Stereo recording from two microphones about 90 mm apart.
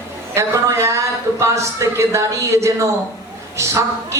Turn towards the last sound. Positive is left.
turn(degrees=-35)  # may be behind; listen again after turning